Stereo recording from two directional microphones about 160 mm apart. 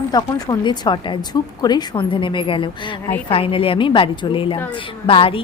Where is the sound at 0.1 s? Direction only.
25° left (ahead or behind).